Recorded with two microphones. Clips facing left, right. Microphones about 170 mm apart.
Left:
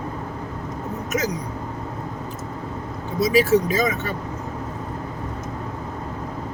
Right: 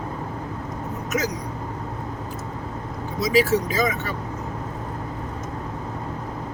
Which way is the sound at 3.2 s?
25° left (ahead or behind).